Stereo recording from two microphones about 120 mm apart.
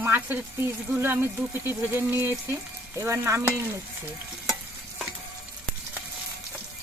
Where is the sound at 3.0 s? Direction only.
20° right (ahead or behind).